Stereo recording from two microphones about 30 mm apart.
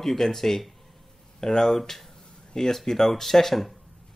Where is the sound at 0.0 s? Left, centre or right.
Centre.